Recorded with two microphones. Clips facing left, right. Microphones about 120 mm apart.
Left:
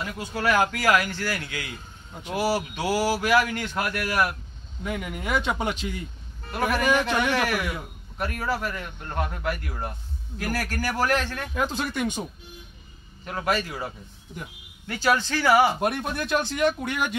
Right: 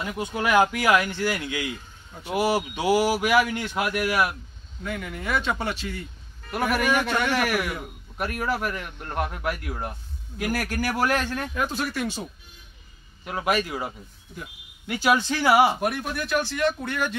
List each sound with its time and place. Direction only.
0.0 s speech: 20° right (ahead or behind)
4.8 s speech: 10° left (ahead or behind)
6.5 s speech: 10° right (ahead or behind)
11.5 s speech: 20° left (ahead or behind)
13.2 s speech: 15° right (ahead or behind)
15.8 s speech: 25° left (ahead or behind)